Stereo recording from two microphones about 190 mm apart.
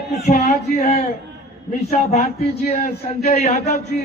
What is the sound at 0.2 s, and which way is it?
A man's voice, 35° left (ahead or behind).